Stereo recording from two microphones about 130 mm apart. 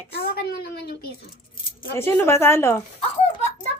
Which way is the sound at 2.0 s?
15° left (ahead or behind).